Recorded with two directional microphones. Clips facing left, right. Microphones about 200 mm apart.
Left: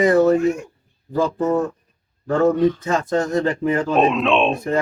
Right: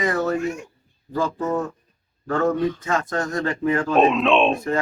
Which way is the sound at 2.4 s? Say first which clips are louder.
Left 5 dB; 25° left (ahead or behind).